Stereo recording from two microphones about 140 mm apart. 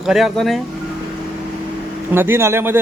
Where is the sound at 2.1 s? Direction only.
15° right (ahead or behind).